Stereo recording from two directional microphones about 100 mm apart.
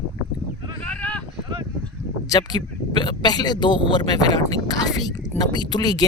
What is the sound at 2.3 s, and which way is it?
Speech, 45° left (ahead or behind).